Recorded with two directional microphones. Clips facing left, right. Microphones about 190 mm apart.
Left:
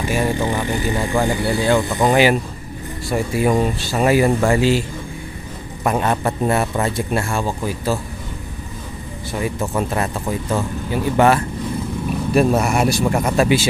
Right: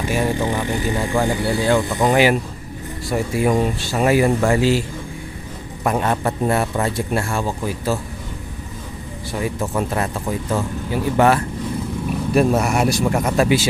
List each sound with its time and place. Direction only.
0.1 s speech: centre (ahead or behind)
1.7 s speech: 25° left (ahead or behind)
4.4 s speech: 20° left (ahead or behind)
5.9 s a man's voice: 15° left (ahead or behind)
6.9 s speech: 25° left (ahead or behind)
9.3 s a man's voice: 15° left (ahead or behind)